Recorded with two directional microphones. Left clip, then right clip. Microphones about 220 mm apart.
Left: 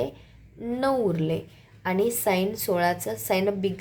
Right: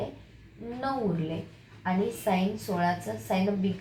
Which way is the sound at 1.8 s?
50° left (ahead or behind).